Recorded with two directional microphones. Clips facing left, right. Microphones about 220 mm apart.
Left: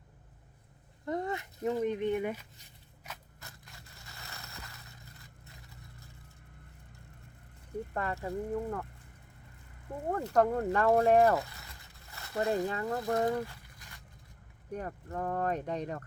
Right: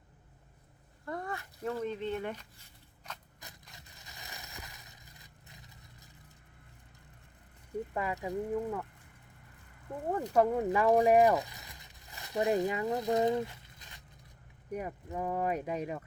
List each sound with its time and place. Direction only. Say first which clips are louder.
1.0 s speech: left 5 dB; 20° left (ahead or behind)
3.4 s crushing: left 1 dB; 20° right (ahead or behind)
7.9 s speech: even; 10° right (ahead or behind)
10.2 s speech: even; 10° right (ahead or behind)
14.7 s speech: right 1 dB; 10° right (ahead or behind)